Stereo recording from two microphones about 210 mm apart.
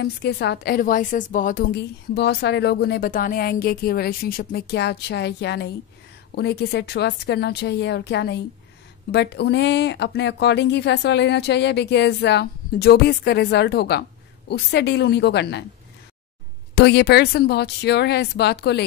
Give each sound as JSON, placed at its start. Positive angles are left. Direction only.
{"t": 0.0, "sound": "a woman's voice", "side_deg": 50}
{"t": 16.7, "sound": "a woman's voice", "side_deg": 50}